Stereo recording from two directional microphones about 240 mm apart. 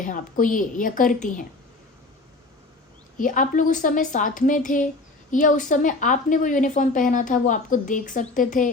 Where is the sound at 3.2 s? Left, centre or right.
Left.